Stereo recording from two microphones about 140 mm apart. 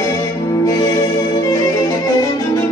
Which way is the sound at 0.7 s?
30° left (ahead or behind).